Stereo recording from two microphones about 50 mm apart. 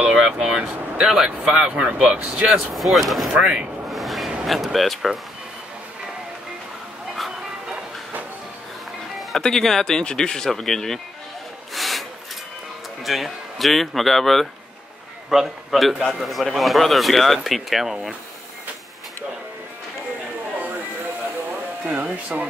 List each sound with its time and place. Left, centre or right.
0.0 s speech: centre
1.8 s speech: right
2.7 s speech: centre
3.3 s speech: centre
3.9 s a sound: centre
4.7 s speech: centre
9.3 s speech: centre
11.7 s wood: centre
13.0 s speech: centre
22.0 s speech: right